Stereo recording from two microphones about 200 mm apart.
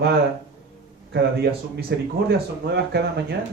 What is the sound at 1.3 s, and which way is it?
Speech, 50° right (ahead or behind).